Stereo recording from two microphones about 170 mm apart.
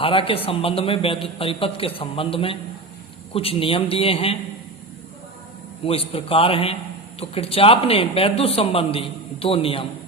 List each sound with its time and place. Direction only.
0.0 s a man's voice: 30° left (ahead or behind)
5.8 s a man's voice: 35° left (ahead or behind)